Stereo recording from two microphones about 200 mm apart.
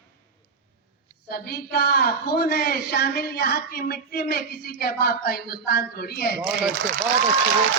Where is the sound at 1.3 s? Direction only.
50° left (ahead or behind).